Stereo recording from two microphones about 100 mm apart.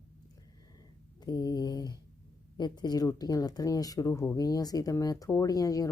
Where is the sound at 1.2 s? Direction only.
40° left (ahead or behind).